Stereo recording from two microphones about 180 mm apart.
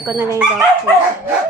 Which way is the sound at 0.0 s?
10° right (ahead or behind).